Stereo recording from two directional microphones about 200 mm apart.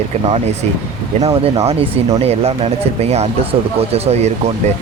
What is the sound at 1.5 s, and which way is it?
Speech, 30° right (ahead or behind).